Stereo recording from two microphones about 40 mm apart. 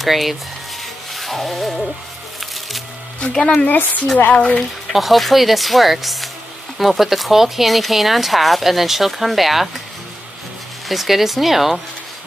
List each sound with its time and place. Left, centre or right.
0.0 s speech: centre
1.1 s music: centre
3.2 s speech: left
3.6 s speech: left
4.6 s speech: centre
10.9 s speech: centre